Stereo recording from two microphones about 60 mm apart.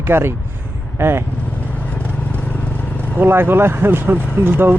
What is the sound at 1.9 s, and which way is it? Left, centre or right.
Vehicle, left.